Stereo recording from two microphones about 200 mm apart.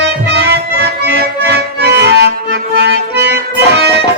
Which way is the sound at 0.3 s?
55° right (ahead or behind).